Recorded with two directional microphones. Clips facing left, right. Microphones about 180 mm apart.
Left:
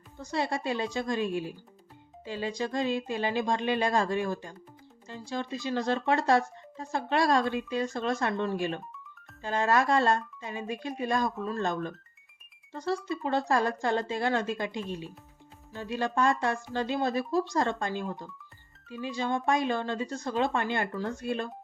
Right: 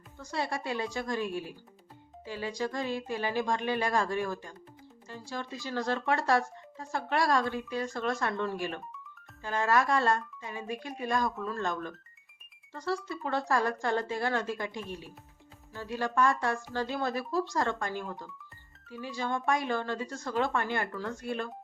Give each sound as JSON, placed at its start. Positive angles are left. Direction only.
{"t": 0.2, "sound": "speech", "side_deg": 20}